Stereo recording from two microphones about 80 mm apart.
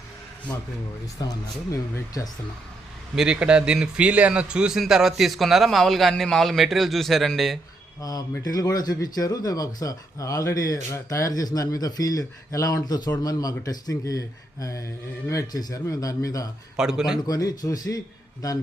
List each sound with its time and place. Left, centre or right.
1.2 s speech: left
1.7 s speech: left
3.2 s a man's voice: centre
8.4 s speech: left
16.7 s a man's voice: centre
17.2 s speech: left